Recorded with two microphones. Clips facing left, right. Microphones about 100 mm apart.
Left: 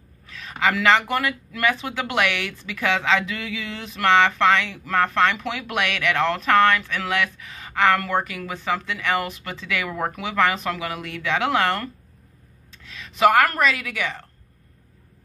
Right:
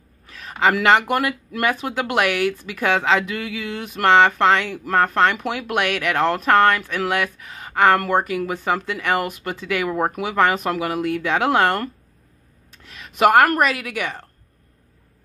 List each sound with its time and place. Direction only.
0.5 s speech: 40° right (ahead or behind)
13.1 s speech: 55° right (ahead or behind)